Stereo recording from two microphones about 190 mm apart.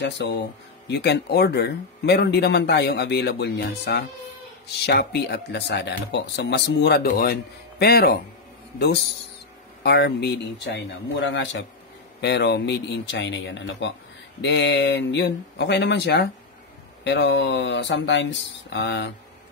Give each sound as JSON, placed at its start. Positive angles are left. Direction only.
{"t": 0.0, "sound": "speech", "side_deg": 70}
{"t": 12.2, "sound": "speech", "side_deg": 65}